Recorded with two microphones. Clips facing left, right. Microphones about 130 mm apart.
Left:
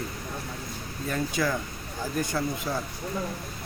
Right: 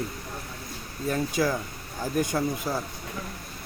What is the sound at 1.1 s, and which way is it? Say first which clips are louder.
Speech: right 2 dB; 10° right (ahead or behind).